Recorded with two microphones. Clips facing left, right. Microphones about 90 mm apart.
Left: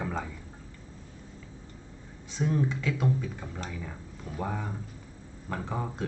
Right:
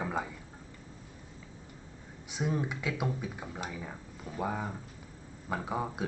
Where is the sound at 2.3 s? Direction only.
15° right (ahead or behind).